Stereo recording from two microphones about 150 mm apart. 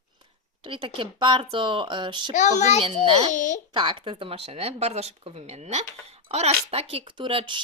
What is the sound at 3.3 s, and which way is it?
Speech, 55° left (ahead or behind).